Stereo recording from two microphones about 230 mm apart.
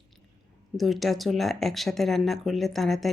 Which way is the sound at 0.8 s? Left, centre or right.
Centre.